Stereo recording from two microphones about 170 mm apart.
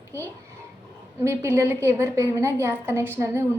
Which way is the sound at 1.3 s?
15° right (ahead or behind).